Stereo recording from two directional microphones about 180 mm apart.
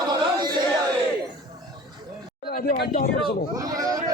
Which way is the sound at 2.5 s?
55° left (ahead or behind).